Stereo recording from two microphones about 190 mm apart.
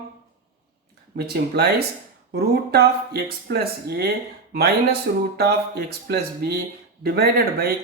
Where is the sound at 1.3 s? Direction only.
55° right (ahead or behind).